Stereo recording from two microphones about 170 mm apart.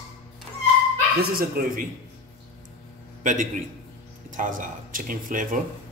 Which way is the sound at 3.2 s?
50° right (ahead or behind).